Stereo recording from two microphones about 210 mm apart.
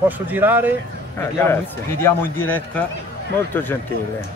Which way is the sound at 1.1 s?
10° left (ahead or behind).